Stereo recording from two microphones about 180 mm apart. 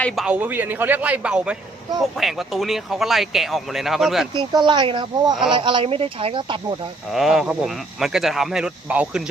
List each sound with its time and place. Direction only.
0.0 s a man's voice: 5° right (ahead or behind)
4.4 s speech: 25° right (ahead or behind)
7.1 s speech: centre (ahead or behind)